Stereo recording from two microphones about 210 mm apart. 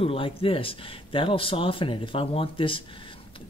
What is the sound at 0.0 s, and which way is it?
Speech, 25° left (ahead or behind).